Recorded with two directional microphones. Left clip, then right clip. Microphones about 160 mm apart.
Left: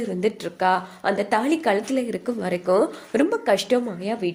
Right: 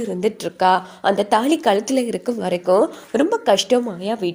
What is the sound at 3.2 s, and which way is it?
Speech, 25° right (ahead or behind).